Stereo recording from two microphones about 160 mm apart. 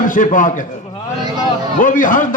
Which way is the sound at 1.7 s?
55° left (ahead or behind).